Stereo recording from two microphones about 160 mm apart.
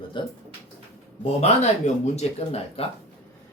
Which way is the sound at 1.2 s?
40° left (ahead or behind).